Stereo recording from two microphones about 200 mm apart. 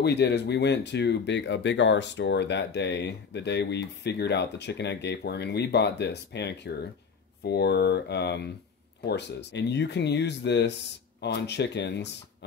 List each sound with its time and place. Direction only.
0.0 s speech: 60° left (ahead or behind)